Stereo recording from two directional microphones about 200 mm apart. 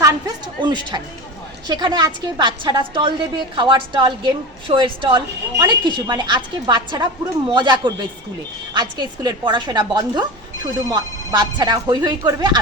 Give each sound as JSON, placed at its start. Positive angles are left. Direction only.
{"t": 0.0, "sound": "a woman's voice", "side_deg": -20}